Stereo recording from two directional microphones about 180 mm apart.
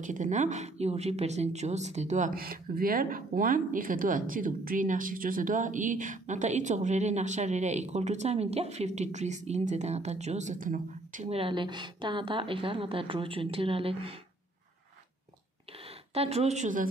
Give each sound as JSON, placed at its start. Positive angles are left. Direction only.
{"t": 0.0, "sound": "speech", "side_deg": -45}
{"t": 11.2, "sound": "a woman's voice", "side_deg": -30}
{"t": 16.2, "sound": "speech", "side_deg": -35}